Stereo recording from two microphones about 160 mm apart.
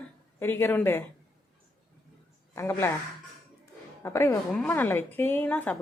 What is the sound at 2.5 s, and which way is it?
Speech, 15° left (ahead or behind).